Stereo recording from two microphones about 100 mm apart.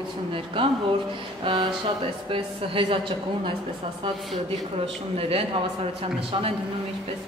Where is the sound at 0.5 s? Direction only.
60° right (ahead or behind).